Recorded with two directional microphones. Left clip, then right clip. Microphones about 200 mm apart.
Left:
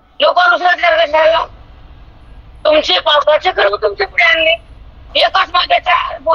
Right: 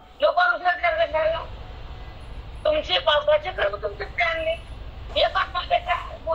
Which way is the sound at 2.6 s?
50° left (ahead or behind).